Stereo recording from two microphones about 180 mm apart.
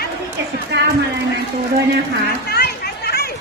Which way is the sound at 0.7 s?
75° right (ahead or behind).